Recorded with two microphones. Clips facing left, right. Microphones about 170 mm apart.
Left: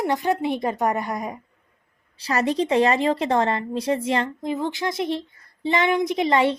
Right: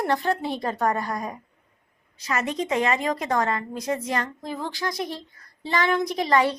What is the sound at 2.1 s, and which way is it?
Speech, 35° left (ahead or behind).